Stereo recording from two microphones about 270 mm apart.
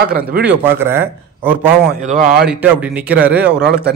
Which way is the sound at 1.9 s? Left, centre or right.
Right.